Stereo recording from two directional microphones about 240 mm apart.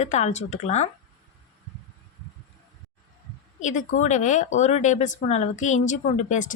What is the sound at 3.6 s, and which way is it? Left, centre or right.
Speech, left.